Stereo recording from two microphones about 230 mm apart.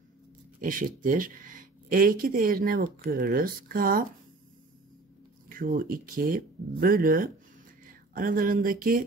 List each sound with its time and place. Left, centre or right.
0.6 s speech: right
5.5 s speech: right